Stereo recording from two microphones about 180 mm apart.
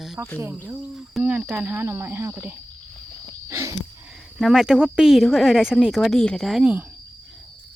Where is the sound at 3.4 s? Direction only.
15° right (ahead or behind).